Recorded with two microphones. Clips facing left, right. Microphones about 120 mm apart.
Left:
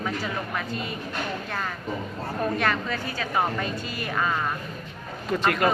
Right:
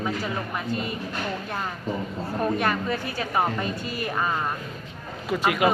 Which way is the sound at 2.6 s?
15° right (ahead or behind).